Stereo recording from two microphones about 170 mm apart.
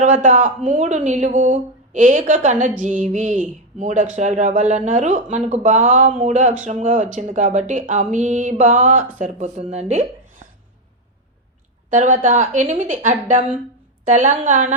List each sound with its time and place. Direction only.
0.0 s speech: 45° right (ahead or behind)
11.9 s speech: 50° right (ahead or behind)